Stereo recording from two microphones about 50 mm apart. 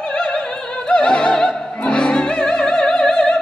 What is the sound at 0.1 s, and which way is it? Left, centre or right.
Opera, centre.